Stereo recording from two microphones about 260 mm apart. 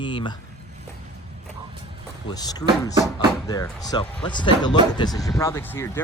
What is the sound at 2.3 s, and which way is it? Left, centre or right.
Speech, centre.